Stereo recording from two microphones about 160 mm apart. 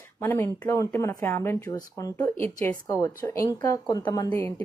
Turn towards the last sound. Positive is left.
turn(degrees=20)  # may be behind; listen again after turning